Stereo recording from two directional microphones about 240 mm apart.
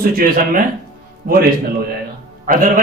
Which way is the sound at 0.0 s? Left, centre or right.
Right.